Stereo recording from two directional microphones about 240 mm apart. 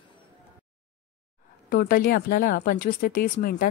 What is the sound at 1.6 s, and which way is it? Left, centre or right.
Speech, left.